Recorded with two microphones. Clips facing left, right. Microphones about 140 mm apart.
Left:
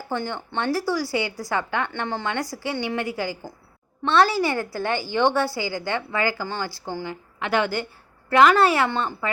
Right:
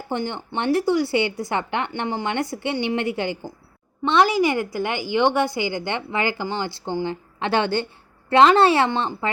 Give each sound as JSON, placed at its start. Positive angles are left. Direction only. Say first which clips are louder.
{"t": 0.1, "sound": "a woman's voice", "louder": "right 2 dB", "side_deg": -20}